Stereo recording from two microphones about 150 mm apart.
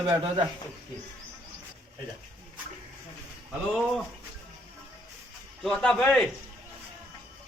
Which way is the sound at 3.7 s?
Centre (ahead or behind).